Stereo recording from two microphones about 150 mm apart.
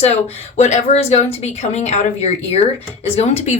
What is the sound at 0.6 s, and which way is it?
Speech, 50° left (ahead or behind).